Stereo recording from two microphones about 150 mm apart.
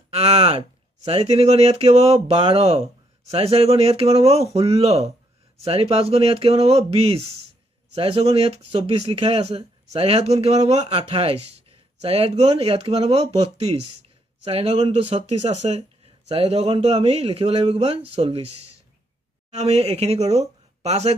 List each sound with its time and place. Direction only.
0.1 s speech: 45° right (ahead or behind)